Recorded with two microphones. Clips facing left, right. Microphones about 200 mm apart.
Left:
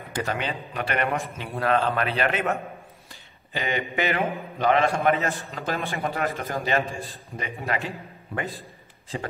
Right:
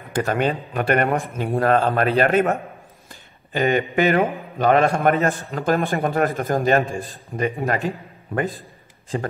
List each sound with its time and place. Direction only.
0.1 s a man's voice: 50° right (ahead or behind)
9.1 s a man's voice: 50° right (ahead or behind)